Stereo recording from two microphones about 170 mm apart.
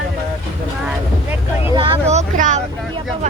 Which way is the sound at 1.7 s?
30° right (ahead or behind).